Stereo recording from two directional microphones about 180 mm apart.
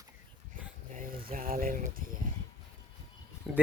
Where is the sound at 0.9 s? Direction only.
50° right (ahead or behind).